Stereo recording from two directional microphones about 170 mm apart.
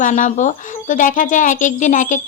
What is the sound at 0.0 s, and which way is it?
A child's voice, 50° left (ahead or behind).